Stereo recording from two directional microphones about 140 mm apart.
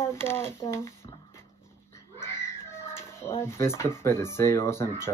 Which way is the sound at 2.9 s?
15° left (ahead or behind).